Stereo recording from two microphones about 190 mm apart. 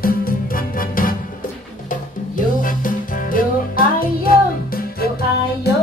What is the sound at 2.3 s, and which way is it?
Music, 45° left (ahead or behind).